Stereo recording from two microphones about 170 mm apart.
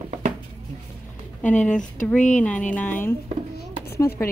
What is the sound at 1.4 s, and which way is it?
Speech, 10° left (ahead or behind).